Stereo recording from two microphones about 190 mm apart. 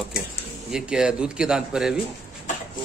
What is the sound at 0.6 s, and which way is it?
A man's voice, 5° right (ahead or behind).